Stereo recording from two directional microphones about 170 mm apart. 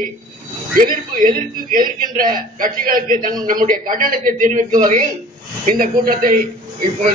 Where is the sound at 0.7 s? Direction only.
50° right (ahead or behind).